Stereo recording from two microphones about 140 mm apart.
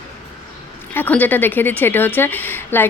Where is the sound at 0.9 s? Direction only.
15° left (ahead or behind).